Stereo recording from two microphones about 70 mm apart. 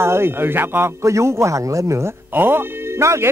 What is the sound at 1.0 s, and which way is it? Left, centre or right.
Speech, right.